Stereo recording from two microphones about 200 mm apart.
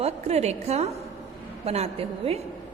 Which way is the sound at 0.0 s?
30° right (ahead or behind).